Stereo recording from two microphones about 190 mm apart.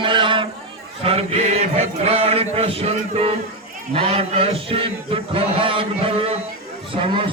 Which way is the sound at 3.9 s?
35° right (ahead or behind).